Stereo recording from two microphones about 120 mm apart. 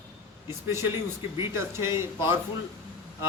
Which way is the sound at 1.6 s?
20° right (ahead or behind).